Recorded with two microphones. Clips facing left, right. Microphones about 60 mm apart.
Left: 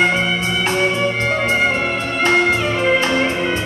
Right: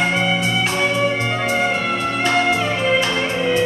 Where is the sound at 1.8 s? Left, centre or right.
Left.